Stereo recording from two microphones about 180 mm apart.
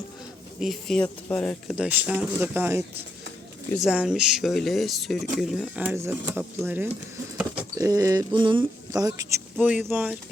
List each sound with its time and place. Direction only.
0.6 s speech: centre (ahead or behind)
1.7 s speech: 5° right (ahead or behind)
5.8 s speech: 15° right (ahead or behind)
9.6 s speech: 10° right (ahead or behind)